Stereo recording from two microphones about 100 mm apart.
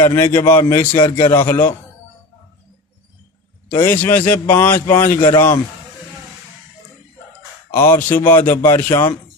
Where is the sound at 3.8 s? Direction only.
20° left (ahead or behind).